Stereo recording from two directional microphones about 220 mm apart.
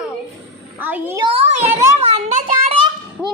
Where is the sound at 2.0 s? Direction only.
25° right (ahead or behind).